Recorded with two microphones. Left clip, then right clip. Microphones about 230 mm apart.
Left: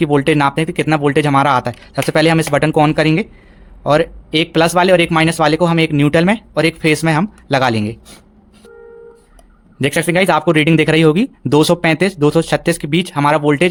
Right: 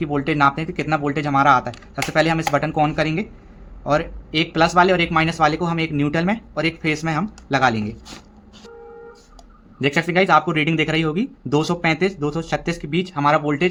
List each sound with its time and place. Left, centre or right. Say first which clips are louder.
0.0 s speech: left 5 dB; left
9.8 s speech: left 4 dB; left